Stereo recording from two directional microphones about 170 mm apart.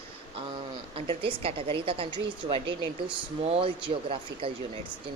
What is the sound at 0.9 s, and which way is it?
A woman's voice, 30° right (ahead or behind).